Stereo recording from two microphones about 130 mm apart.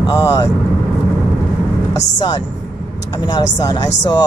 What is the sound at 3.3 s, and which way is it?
Speech, 25° left (ahead or behind).